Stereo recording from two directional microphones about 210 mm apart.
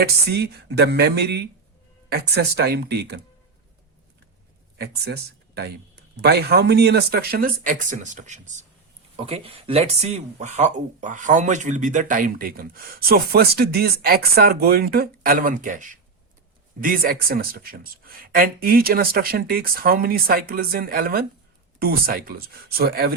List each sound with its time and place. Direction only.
0.0 s speech: 50° right (ahead or behind)
4.8 s speech: 50° right (ahead or behind)